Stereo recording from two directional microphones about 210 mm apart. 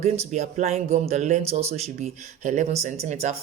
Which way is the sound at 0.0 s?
35° right (ahead or behind).